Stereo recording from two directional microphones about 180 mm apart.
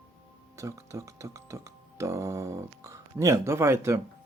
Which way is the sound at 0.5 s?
15° right (ahead or behind).